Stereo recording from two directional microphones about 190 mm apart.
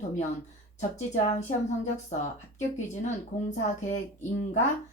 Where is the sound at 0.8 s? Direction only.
35° left (ahead or behind).